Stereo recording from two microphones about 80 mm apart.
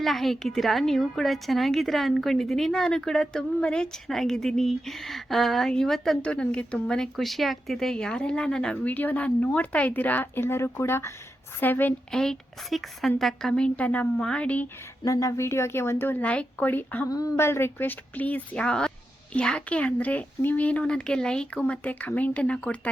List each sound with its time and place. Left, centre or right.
0.0 s a woman's voice: centre
8.8 s a woman's voice: left
12.1 s speech: centre
15.0 s speech: left
16.2 s a woman's voice: centre
17.1 s speech: left
17.3 s speech: left; by 22.9 s centre